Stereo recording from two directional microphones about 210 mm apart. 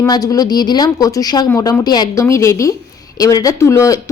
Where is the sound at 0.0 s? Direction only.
15° left (ahead or behind).